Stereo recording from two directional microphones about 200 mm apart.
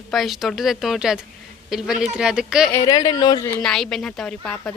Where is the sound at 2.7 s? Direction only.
20° left (ahead or behind).